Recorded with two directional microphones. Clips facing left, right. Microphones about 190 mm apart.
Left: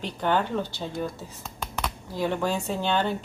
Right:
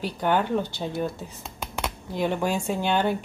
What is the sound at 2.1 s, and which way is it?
Speech, 15° right (ahead or behind).